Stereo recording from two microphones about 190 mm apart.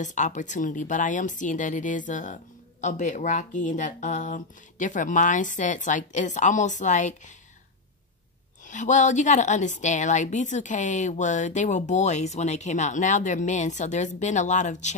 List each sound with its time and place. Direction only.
0.0 s a woman's voice: 40° left (ahead or behind)
8.6 s a woman's voice: 40° left (ahead or behind)